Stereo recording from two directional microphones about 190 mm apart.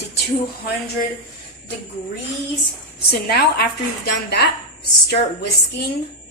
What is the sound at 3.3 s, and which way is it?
Speech, 55° left (ahead or behind).